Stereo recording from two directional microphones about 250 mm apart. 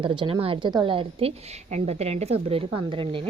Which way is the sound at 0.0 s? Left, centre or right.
Centre.